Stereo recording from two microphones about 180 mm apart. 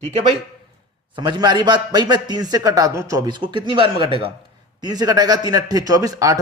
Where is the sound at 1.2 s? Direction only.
25° right (ahead or behind).